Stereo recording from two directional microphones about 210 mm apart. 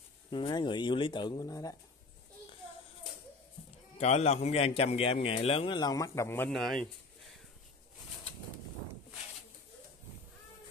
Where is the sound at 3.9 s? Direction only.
30° left (ahead or behind); by 6.8 s centre (ahead or behind).